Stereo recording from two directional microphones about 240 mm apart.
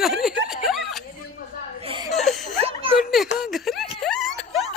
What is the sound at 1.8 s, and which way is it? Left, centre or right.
Chuckle, right.